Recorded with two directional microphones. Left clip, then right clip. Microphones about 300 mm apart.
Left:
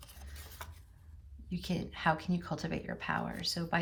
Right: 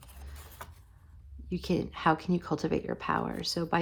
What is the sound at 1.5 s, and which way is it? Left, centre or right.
Speech, centre.